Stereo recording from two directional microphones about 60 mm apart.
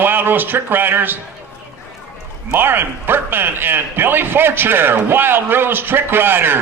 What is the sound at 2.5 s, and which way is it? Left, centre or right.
Speech, right.